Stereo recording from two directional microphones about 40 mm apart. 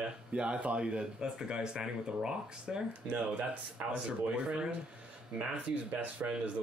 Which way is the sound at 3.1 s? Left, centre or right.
Right.